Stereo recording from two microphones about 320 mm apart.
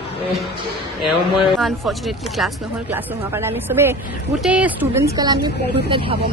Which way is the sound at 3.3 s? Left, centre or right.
Centre.